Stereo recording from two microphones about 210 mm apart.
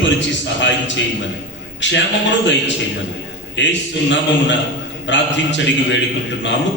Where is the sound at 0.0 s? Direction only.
60° left (ahead or behind).